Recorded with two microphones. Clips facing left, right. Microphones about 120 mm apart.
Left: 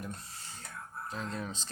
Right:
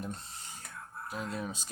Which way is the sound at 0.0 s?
25° right (ahead or behind).